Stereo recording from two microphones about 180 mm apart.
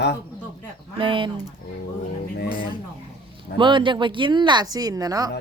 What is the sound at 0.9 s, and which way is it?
Speech, 30° right (ahead or behind).